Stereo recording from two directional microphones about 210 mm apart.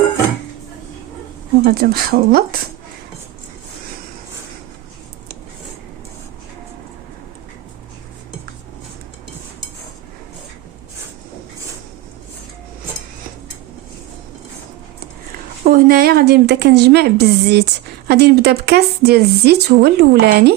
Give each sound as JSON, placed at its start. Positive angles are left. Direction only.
{"t": 1.6, "sound": "a woman's voice", "side_deg": -45}
{"t": 15.6, "sound": "a woman's voice", "side_deg": -45}